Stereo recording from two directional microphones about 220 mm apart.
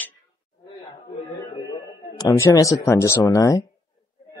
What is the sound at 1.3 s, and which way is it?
A man's voice, 15° left (ahead or behind).